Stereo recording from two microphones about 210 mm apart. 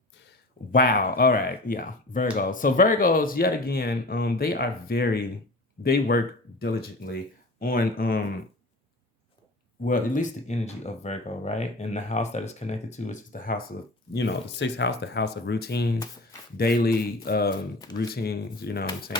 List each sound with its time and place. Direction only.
0.7 s speech: 45° left (ahead or behind)
9.8 s speech: 40° left (ahead or behind)
14.1 s speech: 55° left (ahead or behind)